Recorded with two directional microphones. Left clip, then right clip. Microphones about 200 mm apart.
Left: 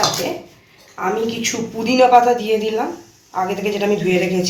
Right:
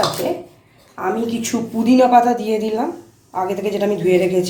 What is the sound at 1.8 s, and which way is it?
Dishes, 40° right (ahead or behind).